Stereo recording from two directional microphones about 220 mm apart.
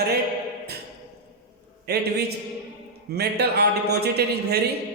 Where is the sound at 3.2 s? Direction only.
45° right (ahead or behind).